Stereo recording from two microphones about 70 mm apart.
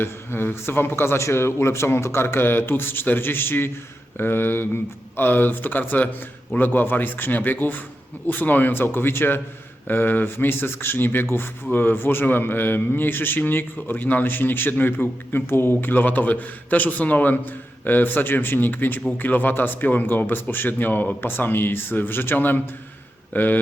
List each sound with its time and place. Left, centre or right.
0.0 s a man's voice: left